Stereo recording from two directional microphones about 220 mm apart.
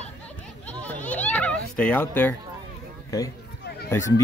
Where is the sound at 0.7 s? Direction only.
5° left (ahead or behind).